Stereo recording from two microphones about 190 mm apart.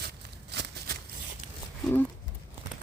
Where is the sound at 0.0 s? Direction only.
60° right (ahead or behind).